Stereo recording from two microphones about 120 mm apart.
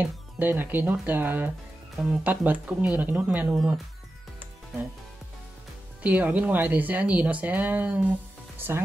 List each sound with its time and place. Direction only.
0.0 s speech: 15° right (ahead or behind)
6.0 s speech: 15° right (ahead or behind)